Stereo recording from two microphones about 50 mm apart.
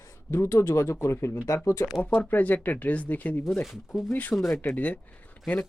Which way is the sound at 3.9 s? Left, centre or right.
Centre.